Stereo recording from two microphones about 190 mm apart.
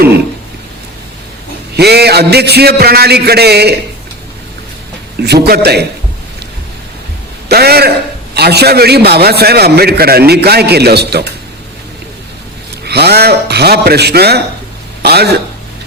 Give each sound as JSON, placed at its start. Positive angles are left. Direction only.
{"t": 1.7, "sound": "a man's voice", "side_deg": -60}
{"t": 5.2, "sound": "a man's voice", "side_deg": -60}
{"t": 7.4, "sound": "a man's voice", "side_deg": -55}
{"t": 12.8, "sound": "a man's voice", "side_deg": -60}